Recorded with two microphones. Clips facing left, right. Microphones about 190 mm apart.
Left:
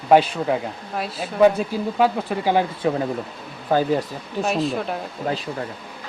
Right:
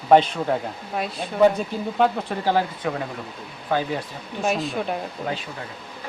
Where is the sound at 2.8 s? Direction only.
30° left (ahead or behind).